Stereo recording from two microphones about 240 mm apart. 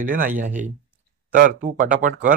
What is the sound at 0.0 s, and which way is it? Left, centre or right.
Speech, right.